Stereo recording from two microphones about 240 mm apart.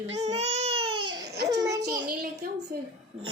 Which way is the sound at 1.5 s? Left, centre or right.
Centre.